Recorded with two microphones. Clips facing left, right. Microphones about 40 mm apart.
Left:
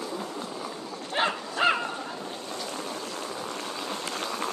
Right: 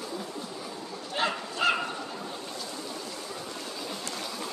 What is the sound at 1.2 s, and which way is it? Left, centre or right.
Dog, left.